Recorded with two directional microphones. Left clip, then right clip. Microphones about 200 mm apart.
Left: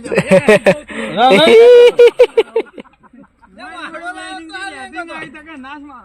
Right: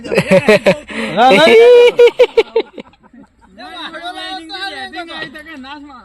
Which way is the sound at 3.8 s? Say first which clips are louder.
Right 1 dB; 60° left (ahead or behind).